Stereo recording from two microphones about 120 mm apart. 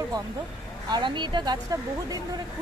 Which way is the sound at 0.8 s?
40° right (ahead or behind).